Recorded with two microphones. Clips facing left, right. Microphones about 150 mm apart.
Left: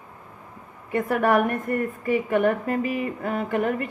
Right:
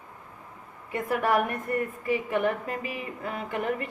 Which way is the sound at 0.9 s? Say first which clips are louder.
Left 5 dB; 55° left (ahead or behind).